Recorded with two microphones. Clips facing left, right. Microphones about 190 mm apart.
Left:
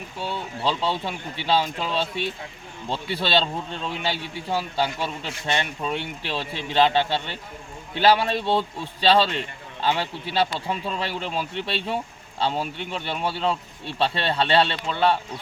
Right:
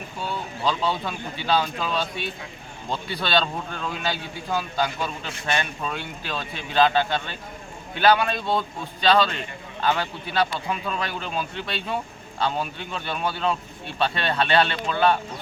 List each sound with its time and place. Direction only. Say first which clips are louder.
0.2 s a man's voice: even; 25° left (ahead or behind)